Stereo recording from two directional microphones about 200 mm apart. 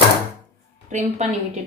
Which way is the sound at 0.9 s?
35° right (ahead or behind).